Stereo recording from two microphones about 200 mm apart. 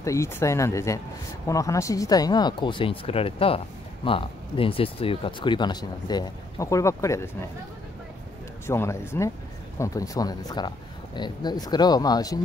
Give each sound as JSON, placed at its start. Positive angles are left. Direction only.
{"t": 0.0, "sound": "speech", "side_deg": 15}
{"t": 8.6, "sound": "speech", "side_deg": 10}